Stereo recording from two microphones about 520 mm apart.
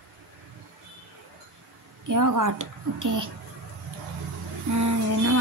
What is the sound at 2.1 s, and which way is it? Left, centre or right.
Speech, right.